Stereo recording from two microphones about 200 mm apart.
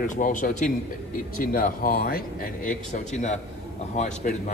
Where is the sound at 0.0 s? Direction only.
40° left (ahead or behind).